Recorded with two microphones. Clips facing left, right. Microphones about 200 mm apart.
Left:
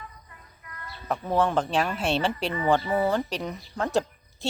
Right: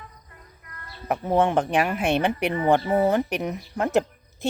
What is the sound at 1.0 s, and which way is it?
Speech, 20° right (ahead or behind).